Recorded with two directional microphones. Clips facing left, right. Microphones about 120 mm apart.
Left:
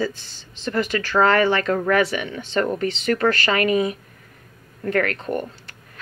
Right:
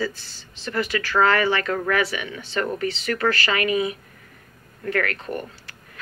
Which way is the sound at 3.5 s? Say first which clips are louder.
Left 3 dB; 40° left (ahead or behind).